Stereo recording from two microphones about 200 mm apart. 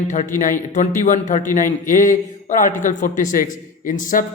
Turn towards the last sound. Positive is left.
turn(degrees=40)  # may be behind; listen again after turning